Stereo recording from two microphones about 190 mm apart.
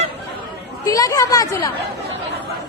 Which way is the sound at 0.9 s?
20° left (ahead or behind).